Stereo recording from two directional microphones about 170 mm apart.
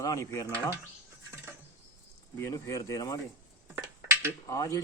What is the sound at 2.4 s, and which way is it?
Speech, 20° left (ahead or behind).